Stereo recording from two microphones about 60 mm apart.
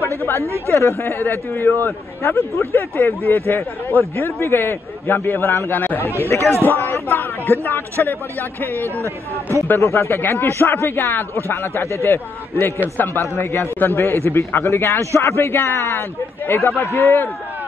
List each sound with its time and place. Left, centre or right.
0.2 s a man's voice: left
1.2 s a man's voice: left
6.0 s a man's voice: left
9.7 s a man's voice: left
14.7 s a man's voice: left
15.3 s a man's voice: left